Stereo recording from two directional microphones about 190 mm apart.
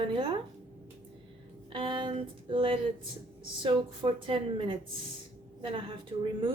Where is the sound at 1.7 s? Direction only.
25° right (ahead or behind).